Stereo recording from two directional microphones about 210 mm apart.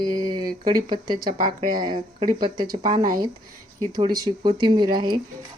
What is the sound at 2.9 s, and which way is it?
Speech, 40° right (ahead or behind).